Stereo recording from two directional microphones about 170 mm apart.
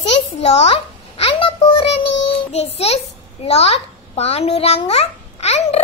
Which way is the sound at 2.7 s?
35° left (ahead or behind).